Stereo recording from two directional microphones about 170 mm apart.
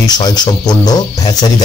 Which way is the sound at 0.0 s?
25° left (ahead or behind).